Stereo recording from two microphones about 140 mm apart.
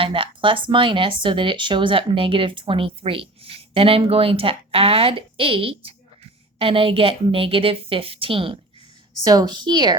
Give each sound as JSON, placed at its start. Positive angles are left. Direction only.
{"t": 0.0, "sound": "speech", "side_deg": -40}
{"t": 9.2, "sound": "speech", "side_deg": -25}